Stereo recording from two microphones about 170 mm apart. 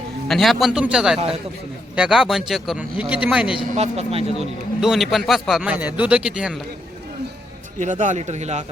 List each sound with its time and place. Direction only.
0.3 s a man's voice: centre (ahead or behind)
3.7 s speech: 40° right (ahead or behind)
4.4 s a man's voice: centre (ahead or behind)
7.8 s a man's voice: 45° right (ahead or behind)